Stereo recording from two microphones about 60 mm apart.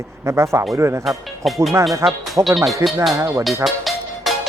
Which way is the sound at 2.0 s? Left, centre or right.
Right.